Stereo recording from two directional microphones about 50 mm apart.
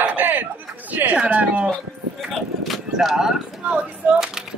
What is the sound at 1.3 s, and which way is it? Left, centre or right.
Speech, right.